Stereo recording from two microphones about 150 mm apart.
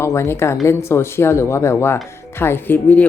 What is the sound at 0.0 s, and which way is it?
Speech, 20° left (ahead or behind).